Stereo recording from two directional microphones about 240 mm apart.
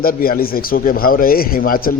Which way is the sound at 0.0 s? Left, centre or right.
Left.